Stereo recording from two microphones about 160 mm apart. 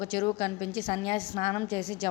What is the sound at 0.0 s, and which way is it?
A woman's voice, 30° left (ahead or behind).